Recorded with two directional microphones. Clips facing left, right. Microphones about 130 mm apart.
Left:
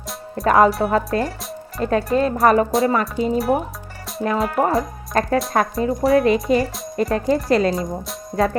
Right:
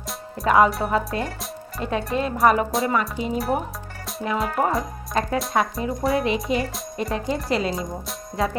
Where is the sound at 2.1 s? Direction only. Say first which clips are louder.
Left 3 dB; 40° left (ahead or behind).